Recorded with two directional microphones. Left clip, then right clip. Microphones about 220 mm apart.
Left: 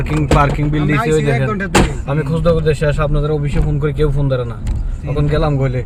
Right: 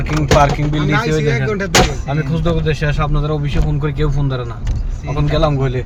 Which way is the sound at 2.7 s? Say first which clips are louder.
Left 3 dB; 25° left (ahead or behind).